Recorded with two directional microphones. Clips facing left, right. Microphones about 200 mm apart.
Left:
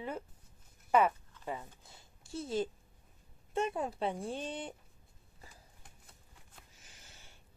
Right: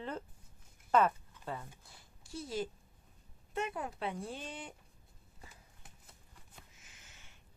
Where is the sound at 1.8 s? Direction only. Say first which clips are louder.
Left 1 dB; 25° left (ahead or behind).